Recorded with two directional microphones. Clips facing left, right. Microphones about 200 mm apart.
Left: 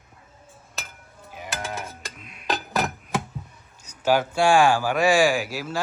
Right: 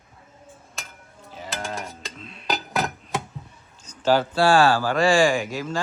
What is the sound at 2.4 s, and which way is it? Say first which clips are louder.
Music: even; centre (ahead or behind).